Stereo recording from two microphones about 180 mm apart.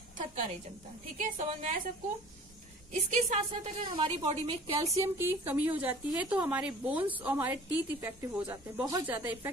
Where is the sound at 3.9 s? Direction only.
30° right (ahead or behind).